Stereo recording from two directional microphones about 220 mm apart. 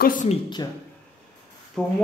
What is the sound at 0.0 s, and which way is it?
Speech, 35° left (ahead or behind).